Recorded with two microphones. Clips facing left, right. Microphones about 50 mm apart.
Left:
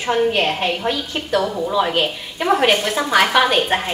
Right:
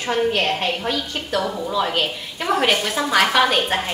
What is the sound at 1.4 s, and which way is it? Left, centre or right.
Speech, centre.